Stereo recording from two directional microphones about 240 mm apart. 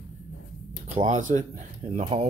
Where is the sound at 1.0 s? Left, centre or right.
Right.